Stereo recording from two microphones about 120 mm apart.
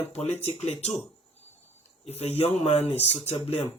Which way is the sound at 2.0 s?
60° left (ahead or behind).